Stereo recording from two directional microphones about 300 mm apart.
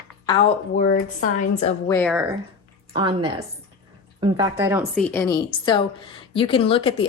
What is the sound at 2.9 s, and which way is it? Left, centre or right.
Speech, centre.